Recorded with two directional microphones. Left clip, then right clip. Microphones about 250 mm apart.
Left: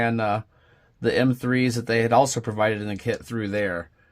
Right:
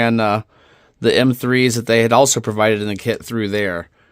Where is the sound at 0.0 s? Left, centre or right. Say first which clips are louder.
Right 7 dB; right.